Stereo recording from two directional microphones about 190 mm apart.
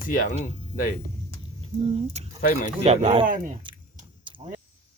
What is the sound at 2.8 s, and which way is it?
Speech, 30° right (ahead or behind).